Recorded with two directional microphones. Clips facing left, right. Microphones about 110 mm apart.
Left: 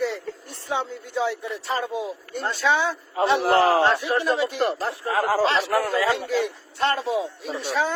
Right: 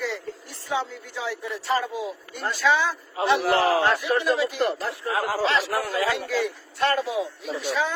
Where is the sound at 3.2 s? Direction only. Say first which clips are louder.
Left 2 dB; 30° left (ahead or behind).